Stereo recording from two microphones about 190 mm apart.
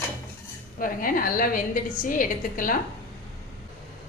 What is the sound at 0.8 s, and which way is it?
A woman's voice, 45° left (ahead or behind).